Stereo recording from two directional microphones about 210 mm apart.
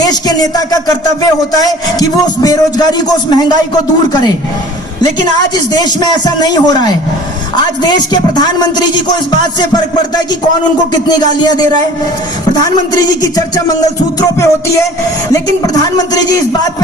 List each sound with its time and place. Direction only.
0.0 s a man's voice: 20° left (ahead or behind)
5.7 s a man's voice: 20° left (ahead or behind)
11.1 s a man's voice: 20° left (ahead or behind)
14.2 s music: 15° left (ahead or behind)
15.3 s a man's voice: 20° left (ahead or behind)